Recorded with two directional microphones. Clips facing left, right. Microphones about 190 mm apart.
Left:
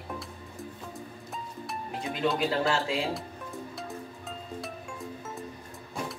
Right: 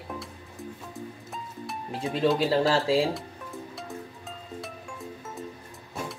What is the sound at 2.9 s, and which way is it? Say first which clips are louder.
Speech: right 8 dB; 30° right (ahead or behind).